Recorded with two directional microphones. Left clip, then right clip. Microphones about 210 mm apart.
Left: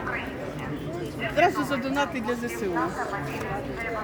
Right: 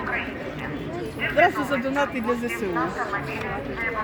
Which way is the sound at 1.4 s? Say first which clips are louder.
Right 3 dB; 25° right (ahead or behind).